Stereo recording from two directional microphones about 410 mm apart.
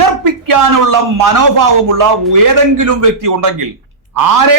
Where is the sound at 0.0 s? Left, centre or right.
Right.